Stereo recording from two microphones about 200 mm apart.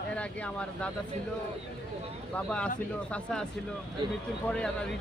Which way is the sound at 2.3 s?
5° left (ahead or behind).